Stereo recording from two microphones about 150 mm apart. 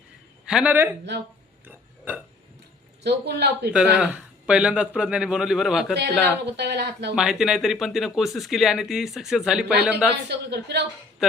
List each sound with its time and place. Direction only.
0.4 s a man's voice: 10° right (ahead or behind)
1.6 s a sound: 10° right (ahead or behind)
3.0 s speech: 90° right
3.9 s a man's voice: 10° right (ahead or behind)
6.4 s speech: 90° right
7.2 s a man's voice: 5° right (ahead or behind)
10.5 s speech: 90° right